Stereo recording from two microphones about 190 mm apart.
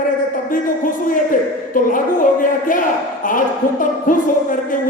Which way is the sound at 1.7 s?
45° left (ahead or behind).